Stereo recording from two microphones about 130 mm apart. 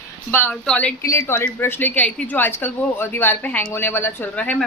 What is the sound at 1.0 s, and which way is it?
A woman's voice, 20° left (ahead or behind).